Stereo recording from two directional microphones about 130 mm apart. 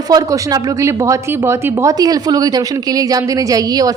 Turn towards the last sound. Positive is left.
turn(degrees=-30)  # may be behind; listen again after turning